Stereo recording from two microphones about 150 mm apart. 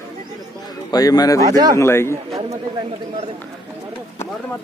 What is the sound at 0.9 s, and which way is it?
Speech, 25° left (ahead or behind).